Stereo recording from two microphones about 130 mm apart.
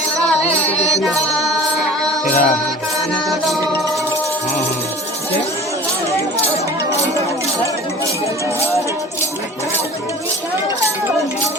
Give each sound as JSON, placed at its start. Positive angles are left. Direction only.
{"t": 1.0, "sound": "music", "side_deg": 0}
{"t": 2.2, "sound": "music", "side_deg": 65}